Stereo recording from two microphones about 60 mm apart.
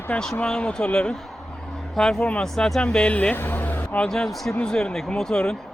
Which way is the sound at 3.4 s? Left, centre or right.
Left.